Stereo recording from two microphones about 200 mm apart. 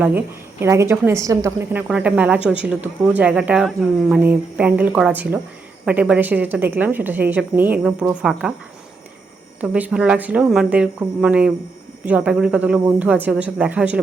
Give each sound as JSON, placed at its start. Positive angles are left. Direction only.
{"t": 0.0, "sound": "speech", "side_deg": -10}
{"t": 9.6, "sound": "speech", "side_deg": -5}